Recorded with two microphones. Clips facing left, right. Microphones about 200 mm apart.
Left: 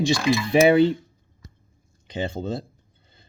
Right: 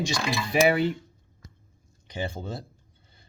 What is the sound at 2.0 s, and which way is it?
Speech, 20° left (ahead or behind).